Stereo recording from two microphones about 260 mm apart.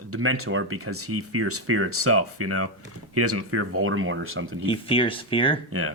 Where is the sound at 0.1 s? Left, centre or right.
Right.